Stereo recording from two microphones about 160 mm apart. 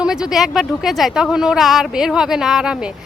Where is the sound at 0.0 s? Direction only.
5° right (ahead or behind).